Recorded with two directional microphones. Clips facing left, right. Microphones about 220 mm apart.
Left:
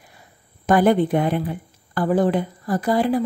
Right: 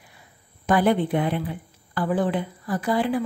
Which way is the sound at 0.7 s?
45° left (ahead or behind).